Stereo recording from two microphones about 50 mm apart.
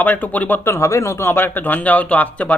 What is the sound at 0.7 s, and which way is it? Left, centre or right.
Speech, left.